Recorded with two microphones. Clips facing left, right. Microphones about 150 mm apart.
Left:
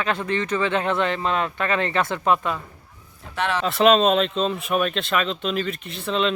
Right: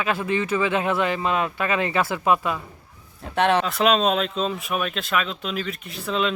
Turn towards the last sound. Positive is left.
turn(degrees=0)  # may be behind; listen again after turning